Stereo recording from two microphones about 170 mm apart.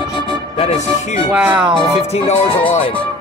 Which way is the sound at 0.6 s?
40° left (ahead or behind).